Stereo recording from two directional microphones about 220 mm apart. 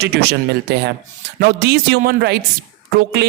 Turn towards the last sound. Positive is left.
turn(degrees=-45)  # may be behind; listen again after turning